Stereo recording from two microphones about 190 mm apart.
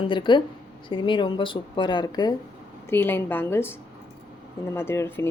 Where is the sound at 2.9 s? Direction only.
10° left (ahead or behind).